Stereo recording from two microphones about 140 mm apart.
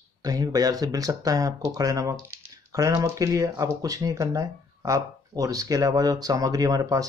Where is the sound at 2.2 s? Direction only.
25° right (ahead or behind).